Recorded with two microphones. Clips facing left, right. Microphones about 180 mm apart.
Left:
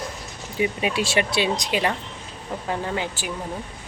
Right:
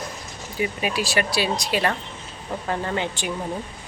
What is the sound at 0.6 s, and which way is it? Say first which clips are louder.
Speech: left 2 dB; 25° left (ahead or behind).